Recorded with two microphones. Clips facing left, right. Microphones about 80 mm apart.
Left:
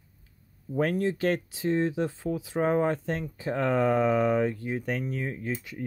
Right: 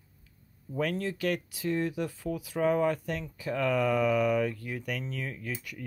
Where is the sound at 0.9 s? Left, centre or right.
Left.